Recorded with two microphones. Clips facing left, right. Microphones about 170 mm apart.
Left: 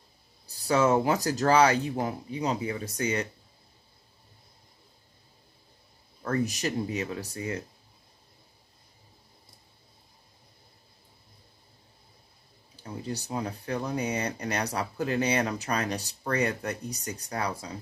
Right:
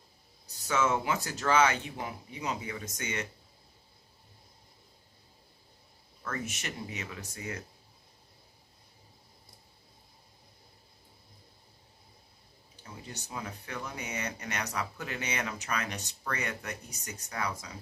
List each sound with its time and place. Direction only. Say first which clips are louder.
0.5 s speech: left 6 dB; 35° left (ahead or behind)
6.2 s speech: left 9 dB; 35° left (ahead or behind)
12.8 s speech: left 10 dB; 35° left (ahead or behind)